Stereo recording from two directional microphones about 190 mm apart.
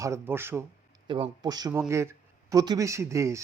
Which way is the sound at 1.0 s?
25° right (ahead or behind).